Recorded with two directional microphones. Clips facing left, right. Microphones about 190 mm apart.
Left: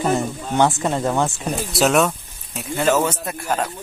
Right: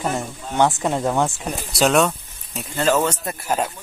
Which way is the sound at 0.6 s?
10° right (ahead or behind).